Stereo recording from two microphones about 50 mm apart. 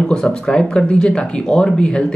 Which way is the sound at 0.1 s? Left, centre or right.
Centre.